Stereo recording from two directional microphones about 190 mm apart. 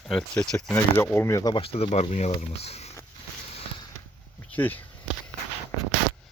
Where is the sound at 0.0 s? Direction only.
Centre (ahead or behind); by 2.9 s 35° left (ahead or behind).